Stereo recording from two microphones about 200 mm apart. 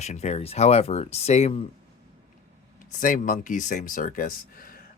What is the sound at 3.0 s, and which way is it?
Speech, 40° left (ahead or behind).